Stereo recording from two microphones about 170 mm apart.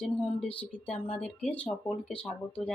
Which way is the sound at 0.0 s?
5° left (ahead or behind).